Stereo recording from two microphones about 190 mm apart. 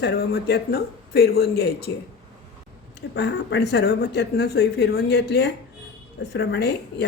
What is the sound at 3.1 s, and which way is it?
Speech, 65° left (ahead or behind).